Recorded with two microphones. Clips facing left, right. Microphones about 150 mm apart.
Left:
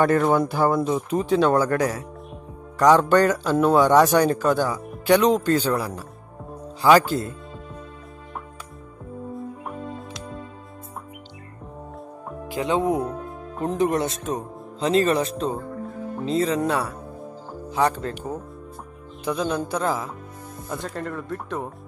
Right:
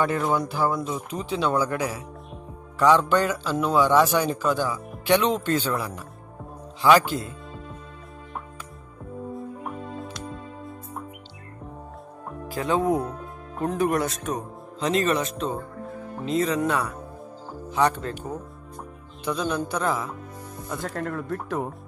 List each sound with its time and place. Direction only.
0.0 s a man's voice: 55° left (ahead or behind)
9.3 s music: centre (ahead or behind)
12.4 s a man's voice: 20° left (ahead or behind)
19.2 s speech: 25° left (ahead or behind)
20.8 s speech: centre (ahead or behind)